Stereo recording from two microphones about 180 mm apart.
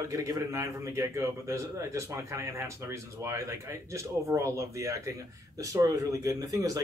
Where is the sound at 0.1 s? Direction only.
20° right (ahead or behind).